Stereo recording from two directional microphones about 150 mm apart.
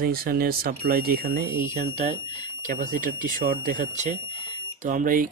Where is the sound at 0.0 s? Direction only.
85° right.